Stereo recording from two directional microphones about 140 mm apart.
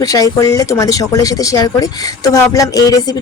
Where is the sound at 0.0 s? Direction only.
25° left (ahead or behind).